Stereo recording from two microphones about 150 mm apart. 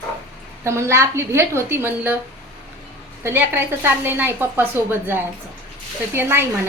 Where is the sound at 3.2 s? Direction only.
15° right (ahead or behind).